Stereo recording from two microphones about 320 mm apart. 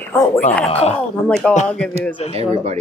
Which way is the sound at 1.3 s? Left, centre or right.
Centre.